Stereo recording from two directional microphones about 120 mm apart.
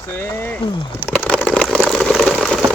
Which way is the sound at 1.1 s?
10° left (ahead or behind).